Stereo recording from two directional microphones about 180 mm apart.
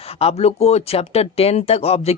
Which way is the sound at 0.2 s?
35° left (ahead or behind).